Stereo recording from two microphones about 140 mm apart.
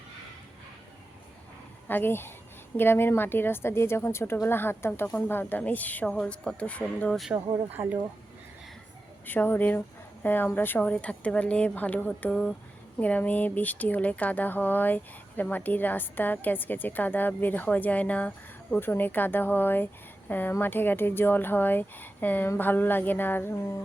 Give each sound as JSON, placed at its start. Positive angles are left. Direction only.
{"t": 1.9, "sound": "speech", "side_deg": 15}
{"t": 9.2, "sound": "speech", "side_deg": 15}